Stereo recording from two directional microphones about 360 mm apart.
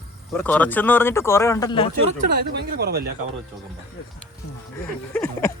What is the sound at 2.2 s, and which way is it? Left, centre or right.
Speech, right.